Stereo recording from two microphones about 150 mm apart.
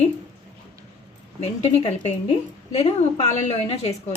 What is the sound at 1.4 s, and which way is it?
Speech, 45° left (ahead or behind).